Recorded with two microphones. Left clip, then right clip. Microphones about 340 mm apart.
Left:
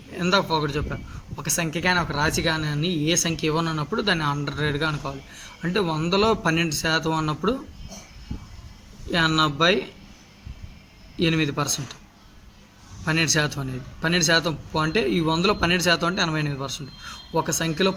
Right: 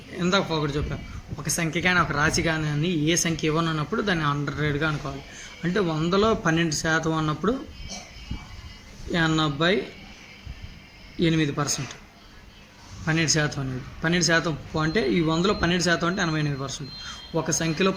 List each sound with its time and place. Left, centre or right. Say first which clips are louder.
0.1 s a man's voice: left 3 dB; left
9.1 s a man's voice: left 3 dB; left
11.2 s a man's voice: left 1 dB; left
13.1 s a man's voice: left 2 dB; left